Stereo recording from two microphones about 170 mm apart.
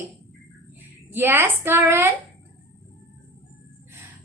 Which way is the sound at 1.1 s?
15° right (ahead or behind).